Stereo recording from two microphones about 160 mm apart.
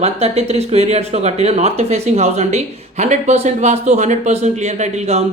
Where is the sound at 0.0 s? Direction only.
40° right (ahead or behind).